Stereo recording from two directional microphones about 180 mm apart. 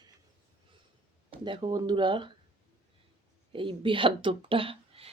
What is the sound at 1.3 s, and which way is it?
Speech, 30° right (ahead or behind).